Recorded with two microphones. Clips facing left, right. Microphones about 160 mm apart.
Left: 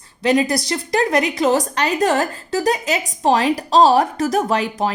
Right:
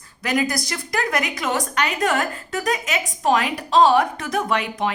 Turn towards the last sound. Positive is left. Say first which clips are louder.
# left 3 dB
turn(degrees=35)  # may be behind; listen again after turning